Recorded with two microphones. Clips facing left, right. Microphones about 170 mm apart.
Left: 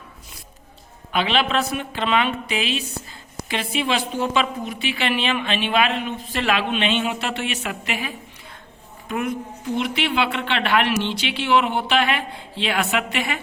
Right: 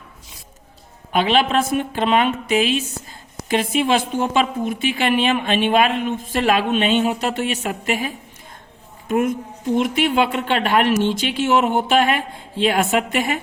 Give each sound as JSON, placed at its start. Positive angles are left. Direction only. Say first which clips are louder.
{"t": 1.1, "sound": "a woman's voice", "louder": "right 4 dB", "side_deg": -45}